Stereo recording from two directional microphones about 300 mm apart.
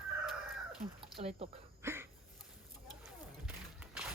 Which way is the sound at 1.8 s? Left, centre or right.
Centre.